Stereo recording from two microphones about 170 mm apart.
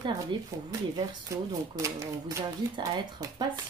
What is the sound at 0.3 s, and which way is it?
Speech, 30° right (ahead or behind).